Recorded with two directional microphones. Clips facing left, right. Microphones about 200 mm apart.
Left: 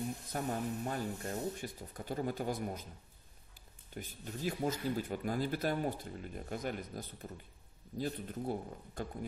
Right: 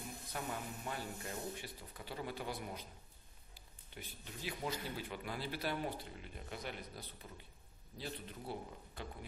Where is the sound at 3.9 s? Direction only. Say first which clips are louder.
Left 7 dB; 45° left (ahead or behind).